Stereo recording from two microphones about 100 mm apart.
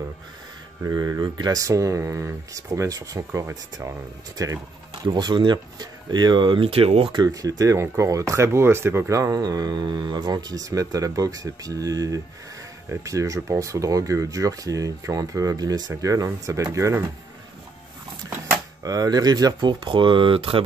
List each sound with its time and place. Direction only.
0.8 s speech: 35° right (ahead or behind)
4.4 s speech: 35° right (ahead or behind)
5.0 s speech: 50° right (ahead or behind)
7.2 s speech: 35° right (ahead or behind)
18.8 s speech: 40° right (ahead or behind); by 20.6 s 65° right (ahead or behind)